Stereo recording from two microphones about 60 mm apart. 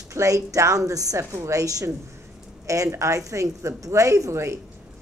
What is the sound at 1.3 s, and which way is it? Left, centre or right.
A woman's voice, right.